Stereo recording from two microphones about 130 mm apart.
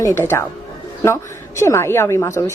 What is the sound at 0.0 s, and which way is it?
Speech, 20° left (ahead or behind).